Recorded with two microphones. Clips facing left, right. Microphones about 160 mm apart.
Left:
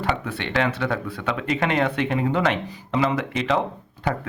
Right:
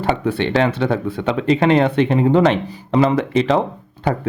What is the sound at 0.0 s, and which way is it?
Speech, 30° right (ahead or behind).